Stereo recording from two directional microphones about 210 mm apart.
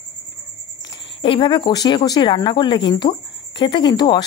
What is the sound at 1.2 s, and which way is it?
Speech, 25° left (ahead or behind).